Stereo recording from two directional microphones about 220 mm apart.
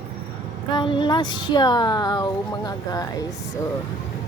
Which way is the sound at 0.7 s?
20° left (ahead or behind).